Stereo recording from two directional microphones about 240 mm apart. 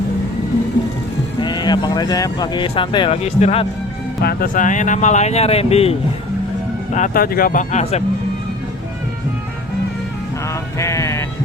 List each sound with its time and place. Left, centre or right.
1.4 s speech: centre
4.2 s speech: left
10.8 s sheep: centre